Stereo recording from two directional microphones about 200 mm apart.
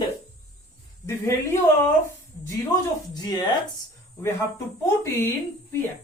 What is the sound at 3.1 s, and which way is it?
Speech, 20° left (ahead or behind).